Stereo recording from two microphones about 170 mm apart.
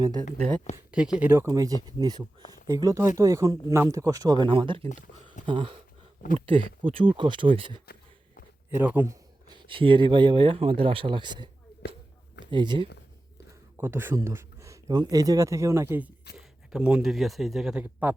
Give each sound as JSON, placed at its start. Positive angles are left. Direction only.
{"t": 0.0, "sound": "speech", "side_deg": -25}
{"t": 0.9, "sound": "speech", "side_deg": -5}
{"t": 1.5, "sound": "speech", "side_deg": -20}
{"t": 8.7, "sound": "speech", "side_deg": -10}
{"t": 9.5, "sound": "speech", "side_deg": -30}
{"t": 11.7, "sound": "a sound", "side_deg": 70}
{"t": 12.5, "sound": "speech", "side_deg": -30}
{"t": 13.7, "sound": "speech", "side_deg": -15}